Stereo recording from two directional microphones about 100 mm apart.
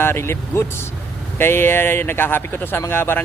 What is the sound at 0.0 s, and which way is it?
Speech, 25° left (ahead or behind).